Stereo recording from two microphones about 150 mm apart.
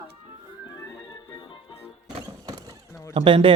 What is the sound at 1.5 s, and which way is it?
Music, 35° left (ahead or behind).